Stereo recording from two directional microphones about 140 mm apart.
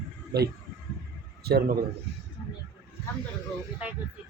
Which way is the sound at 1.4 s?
90° right.